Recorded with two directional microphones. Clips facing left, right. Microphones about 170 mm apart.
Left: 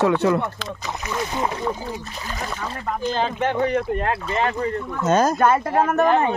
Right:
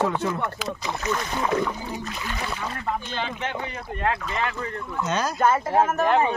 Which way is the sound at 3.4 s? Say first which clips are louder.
Left 10 dB; 65° left (ahead or behind).